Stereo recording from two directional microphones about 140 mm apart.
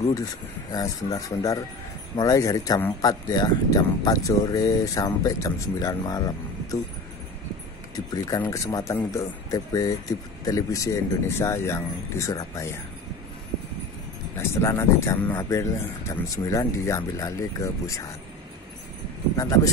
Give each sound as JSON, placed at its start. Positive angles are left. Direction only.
{"t": 0.1, "sound": "speech", "side_deg": 25}
{"t": 8.1, "sound": "speech", "side_deg": 25}
{"t": 14.3, "sound": "speech", "side_deg": 20}
{"t": 19.3, "sound": "speech", "side_deg": 25}